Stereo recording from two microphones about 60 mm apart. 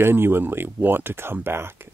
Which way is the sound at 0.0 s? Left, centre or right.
Right.